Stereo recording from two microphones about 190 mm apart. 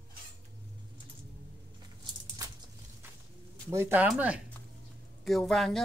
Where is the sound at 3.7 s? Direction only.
10° right (ahead or behind).